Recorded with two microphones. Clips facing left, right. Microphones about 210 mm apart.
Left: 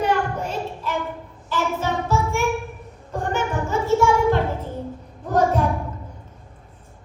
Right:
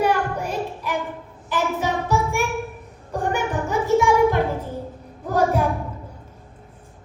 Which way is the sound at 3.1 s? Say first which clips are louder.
Right 1 dB; 15° right (ahead or behind).